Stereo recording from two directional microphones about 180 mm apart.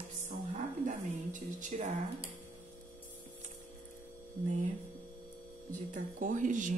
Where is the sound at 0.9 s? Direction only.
45° right (ahead or behind).